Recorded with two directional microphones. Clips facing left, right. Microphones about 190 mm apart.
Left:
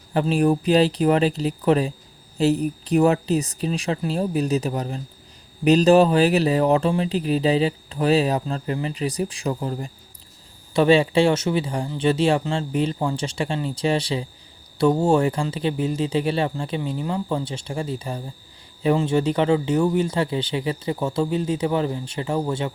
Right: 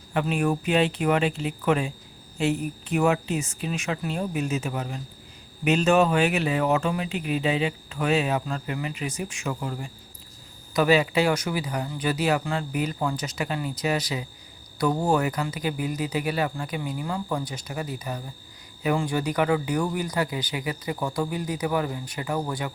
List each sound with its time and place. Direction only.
0.1 s speech: 35° left (ahead or behind)